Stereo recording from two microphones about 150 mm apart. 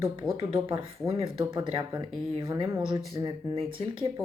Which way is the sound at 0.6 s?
40° right (ahead or behind).